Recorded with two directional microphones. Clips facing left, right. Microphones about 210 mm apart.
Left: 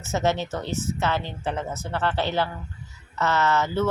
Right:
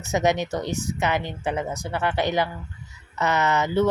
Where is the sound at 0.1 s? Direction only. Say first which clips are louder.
Right 2 dB; 15° right (ahead or behind).